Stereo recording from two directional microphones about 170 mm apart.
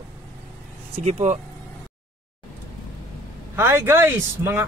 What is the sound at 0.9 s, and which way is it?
Speech, 40° right (ahead or behind).